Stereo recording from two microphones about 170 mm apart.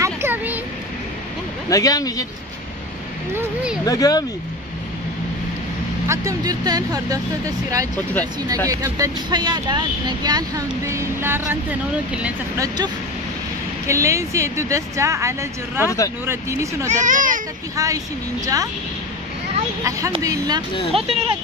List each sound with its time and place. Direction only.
0.0 s a sound: 10° right (ahead or behind)
1.7 s speech: 20° left (ahead or behind)
3.3 s speech: 5° right (ahead or behind)
3.8 s speech: 20° left (ahead or behind)
6.0 s speech: 20° right (ahead or behind)
12.5 s a woman's voice: 20° right (ahead or behind)
16.9 s a child's voice: 50° right (ahead or behind)
17.7 s speech: 20° right (ahead or behind)
19.8 s speech: 20° right (ahead or behind)
20.9 s speech: 35° right (ahead or behind)